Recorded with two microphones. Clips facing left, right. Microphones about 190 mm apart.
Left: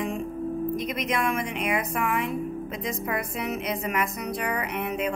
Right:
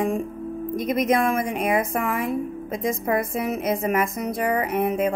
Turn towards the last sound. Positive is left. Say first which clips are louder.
# right 6 dB
turn(degrees=-50)  # may be behind; listen again after turning